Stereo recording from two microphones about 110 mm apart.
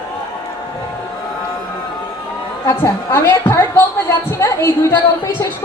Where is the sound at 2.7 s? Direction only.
25° left (ahead or behind).